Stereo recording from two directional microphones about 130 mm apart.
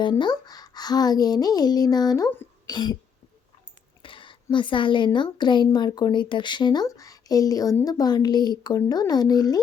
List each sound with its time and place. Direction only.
0.0 s a woman's voice: 35° left (ahead or behind)
4.0 s a sound: 40° left (ahead or behind)
4.5 s a woman's voice: 40° left (ahead or behind)